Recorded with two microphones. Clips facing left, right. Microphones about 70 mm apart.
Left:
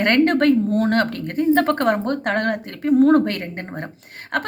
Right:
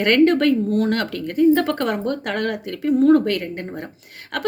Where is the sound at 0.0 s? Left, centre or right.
Left.